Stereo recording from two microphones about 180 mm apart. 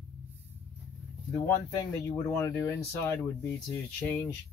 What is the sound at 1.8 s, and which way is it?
Speech, 20° left (ahead or behind).